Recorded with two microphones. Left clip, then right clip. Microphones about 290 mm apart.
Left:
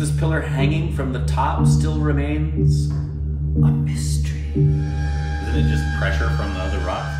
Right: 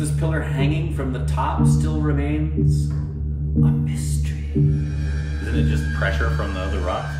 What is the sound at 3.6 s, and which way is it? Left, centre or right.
Speech, centre.